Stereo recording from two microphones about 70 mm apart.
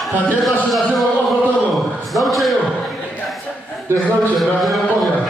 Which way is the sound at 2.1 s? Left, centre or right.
Centre.